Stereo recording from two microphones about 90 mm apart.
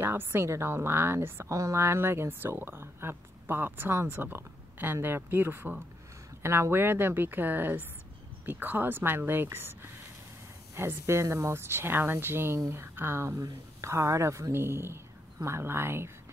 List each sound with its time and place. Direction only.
0.0 s a woman's voice: 25° right (ahead or behind)